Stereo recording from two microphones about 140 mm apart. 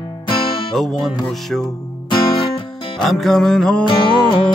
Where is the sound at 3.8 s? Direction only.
35° left (ahead or behind).